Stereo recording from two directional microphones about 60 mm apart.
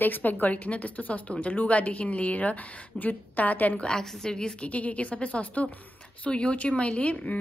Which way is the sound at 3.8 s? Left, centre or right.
Centre.